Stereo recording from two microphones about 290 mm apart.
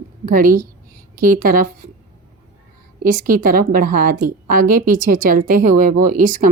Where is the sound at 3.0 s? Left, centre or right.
Right.